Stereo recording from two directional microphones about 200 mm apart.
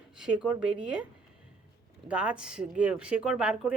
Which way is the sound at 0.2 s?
5° right (ahead or behind).